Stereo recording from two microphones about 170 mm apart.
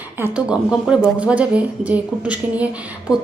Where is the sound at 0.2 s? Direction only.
10° right (ahead or behind).